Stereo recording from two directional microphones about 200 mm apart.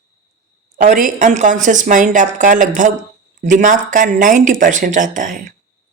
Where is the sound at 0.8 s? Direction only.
40° right (ahead or behind).